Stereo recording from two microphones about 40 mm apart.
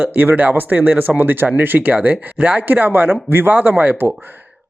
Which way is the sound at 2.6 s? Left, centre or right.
Right.